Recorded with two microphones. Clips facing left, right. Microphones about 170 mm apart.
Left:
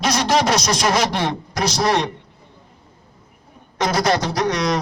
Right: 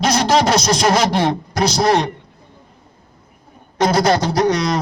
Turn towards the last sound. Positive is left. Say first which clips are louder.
# right 3 dB
turn(degrees=-30)  # may be behind; listen again after turning